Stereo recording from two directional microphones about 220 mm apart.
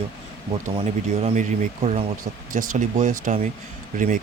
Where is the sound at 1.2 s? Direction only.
35° right (ahead or behind).